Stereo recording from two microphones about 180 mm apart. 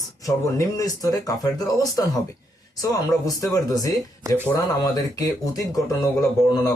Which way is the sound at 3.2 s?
20° left (ahead or behind).